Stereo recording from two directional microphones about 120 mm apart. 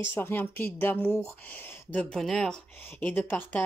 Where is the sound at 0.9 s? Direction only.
15° right (ahead or behind).